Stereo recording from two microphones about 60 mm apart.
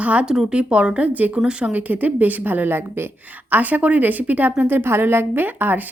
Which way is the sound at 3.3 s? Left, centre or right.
Right.